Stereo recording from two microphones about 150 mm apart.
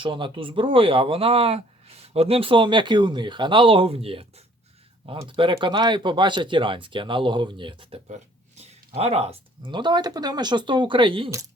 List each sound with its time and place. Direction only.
0.0 s speech: 35° right (ahead or behind)
8.0 s a sound: 50° right (ahead or behind)
9.0 s speech: 45° right (ahead or behind)